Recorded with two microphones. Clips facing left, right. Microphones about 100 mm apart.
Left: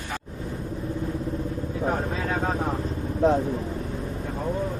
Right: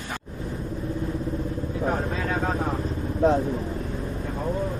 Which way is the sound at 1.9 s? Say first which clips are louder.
Even; 30° left (ahead or behind).